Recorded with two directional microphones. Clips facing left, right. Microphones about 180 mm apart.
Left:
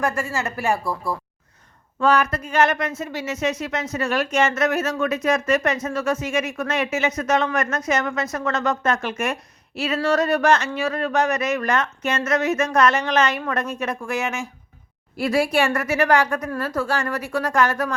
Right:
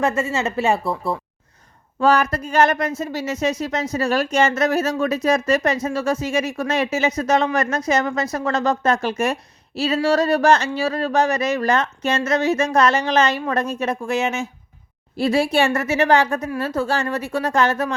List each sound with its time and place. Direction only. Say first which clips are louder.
0.0 s a woman's voice: right 4 dB; 25° right (ahead or behind)
2.0 s a woman's voice: right 2 dB; 35° right (ahead or behind)